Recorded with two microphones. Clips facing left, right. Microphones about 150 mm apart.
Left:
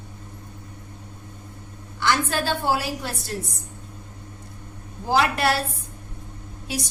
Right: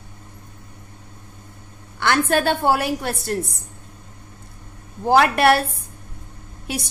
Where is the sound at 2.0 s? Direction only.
60° right (ahead or behind).